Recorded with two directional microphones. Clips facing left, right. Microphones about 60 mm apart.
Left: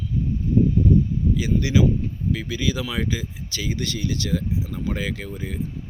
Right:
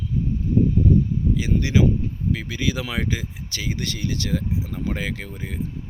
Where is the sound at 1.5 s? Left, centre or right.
Right.